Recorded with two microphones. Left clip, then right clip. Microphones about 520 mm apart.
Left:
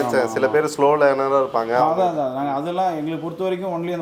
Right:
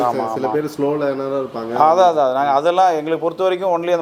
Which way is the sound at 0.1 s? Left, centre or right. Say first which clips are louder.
Left 1 dB; left.